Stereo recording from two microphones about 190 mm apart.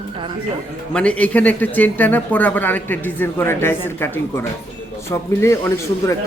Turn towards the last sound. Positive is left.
turn(degrees=15)  # may be behind; listen again after turning